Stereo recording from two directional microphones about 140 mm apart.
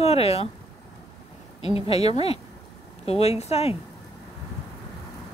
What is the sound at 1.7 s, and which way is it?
Speech, 45° left (ahead or behind).